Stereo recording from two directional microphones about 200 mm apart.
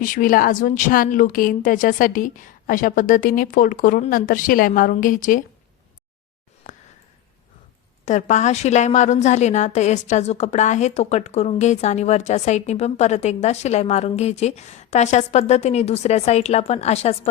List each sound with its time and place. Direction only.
0.0 s a woman's voice: 40° left (ahead or behind)
8.0 s a woman's voice: 35° left (ahead or behind)